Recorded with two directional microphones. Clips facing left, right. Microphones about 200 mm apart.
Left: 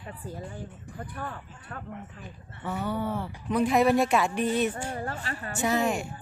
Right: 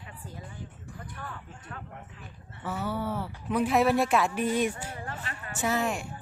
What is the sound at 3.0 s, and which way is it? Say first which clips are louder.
Speech: left 1 dB; 5° right (ahead or behind).